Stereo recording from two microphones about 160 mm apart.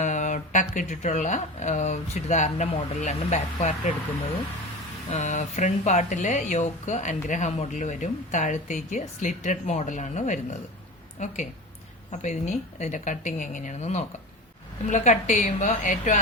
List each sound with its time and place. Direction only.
0.0 s speech: 50° left (ahead or behind)
5.1 s speech: 45° left (ahead or behind)